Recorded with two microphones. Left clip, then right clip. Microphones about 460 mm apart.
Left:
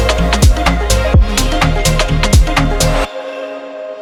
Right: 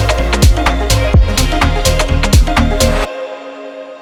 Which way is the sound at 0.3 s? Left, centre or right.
Centre.